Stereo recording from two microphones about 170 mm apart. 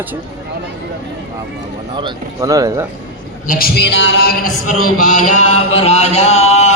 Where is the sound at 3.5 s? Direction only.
70° left (ahead or behind).